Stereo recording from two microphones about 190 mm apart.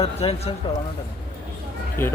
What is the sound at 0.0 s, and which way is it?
Speech, 30° left (ahead or behind).